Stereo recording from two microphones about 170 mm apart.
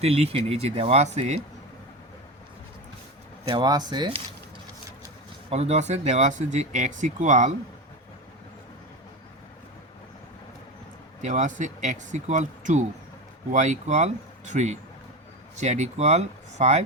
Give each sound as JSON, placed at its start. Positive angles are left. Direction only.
{"t": 0.0, "sound": "speech", "side_deg": -35}
{"t": 3.4, "sound": "speech", "side_deg": -25}
{"t": 5.5, "sound": "speech", "side_deg": -40}
{"t": 11.2, "sound": "speech", "side_deg": -45}